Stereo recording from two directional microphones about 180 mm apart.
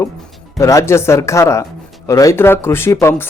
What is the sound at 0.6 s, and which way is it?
Speech, 15° left (ahead or behind).